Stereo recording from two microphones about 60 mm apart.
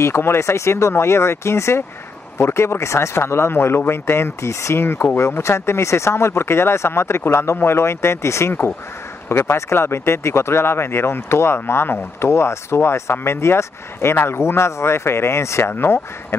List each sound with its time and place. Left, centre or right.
0.0 s speech: left
15.7 s speech: left